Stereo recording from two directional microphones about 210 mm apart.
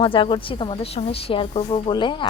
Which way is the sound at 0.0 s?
25° left (ahead or behind).